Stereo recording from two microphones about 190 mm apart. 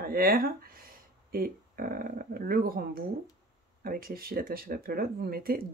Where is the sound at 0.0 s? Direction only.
50° right (ahead or behind).